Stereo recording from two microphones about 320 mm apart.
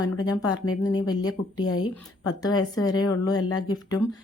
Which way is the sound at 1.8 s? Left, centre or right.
Centre.